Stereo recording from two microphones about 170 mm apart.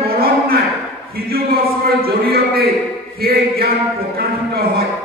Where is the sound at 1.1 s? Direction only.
60° right (ahead or behind).